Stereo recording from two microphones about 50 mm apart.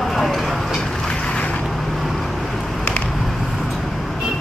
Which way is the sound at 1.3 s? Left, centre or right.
Left.